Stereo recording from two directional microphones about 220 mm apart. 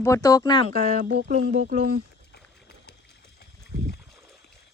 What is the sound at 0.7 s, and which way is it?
Speech, 40° right (ahead or behind).